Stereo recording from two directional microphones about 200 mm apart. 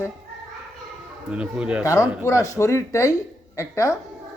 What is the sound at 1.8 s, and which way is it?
Speech, 15° left (ahead or behind).